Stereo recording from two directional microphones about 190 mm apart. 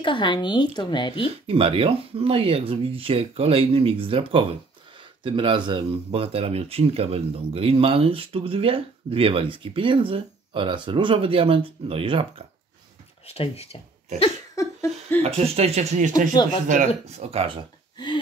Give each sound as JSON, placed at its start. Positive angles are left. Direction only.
{"t": 0.0, "sound": "speech", "side_deg": 25}
{"t": 1.5, "sound": "speech", "side_deg": -30}
{"t": 13.3, "sound": "speech", "side_deg": 30}
{"t": 14.5, "sound": "a sound", "side_deg": 15}
{"t": 15.2, "sound": "speech", "side_deg": -35}
{"t": 17.9, "sound": "a sound", "side_deg": 25}